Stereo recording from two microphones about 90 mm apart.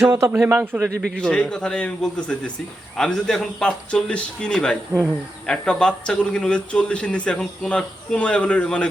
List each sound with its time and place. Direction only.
0.0 s a man's voice: 30° right (ahead or behind)
0.9 s speech: 10° left (ahead or behind)